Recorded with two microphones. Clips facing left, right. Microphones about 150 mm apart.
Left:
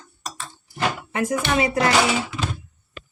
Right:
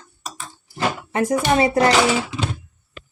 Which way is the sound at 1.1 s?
35° right (ahead or behind).